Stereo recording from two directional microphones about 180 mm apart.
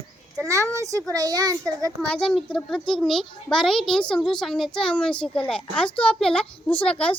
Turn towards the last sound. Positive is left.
turn(degrees=5)  # may be behind; listen again after turning